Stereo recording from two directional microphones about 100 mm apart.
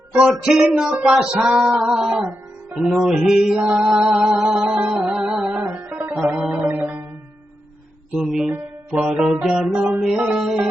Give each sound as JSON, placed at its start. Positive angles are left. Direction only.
{"t": 0.1, "sound": "female singing", "side_deg": -10}
{"t": 2.7, "sound": "music", "side_deg": -5}
{"t": 5.7, "sound": "music", "side_deg": -20}
{"t": 8.2, "sound": "music", "side_deg": -5}
{"t": 8.9, "sound": "female singing", "side_deg": -5}